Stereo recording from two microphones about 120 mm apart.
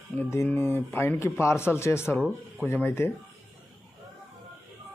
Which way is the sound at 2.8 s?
20° left (ahead or behind).